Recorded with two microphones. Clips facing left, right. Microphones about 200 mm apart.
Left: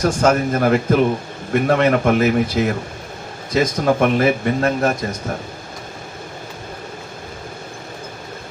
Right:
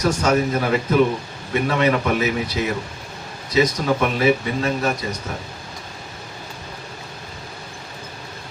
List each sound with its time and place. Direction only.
0.0 s speech: 50° left (ahead or behind)